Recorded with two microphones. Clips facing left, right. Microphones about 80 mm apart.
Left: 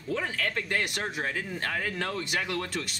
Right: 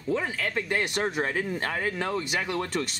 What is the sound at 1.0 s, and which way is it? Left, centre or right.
Speech, right.